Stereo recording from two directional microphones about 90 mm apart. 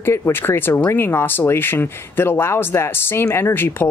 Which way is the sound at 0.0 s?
25° left (ahead or behind).